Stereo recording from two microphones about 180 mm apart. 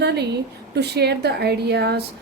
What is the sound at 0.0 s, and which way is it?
A woman's voice, 65° right (ahead or behind).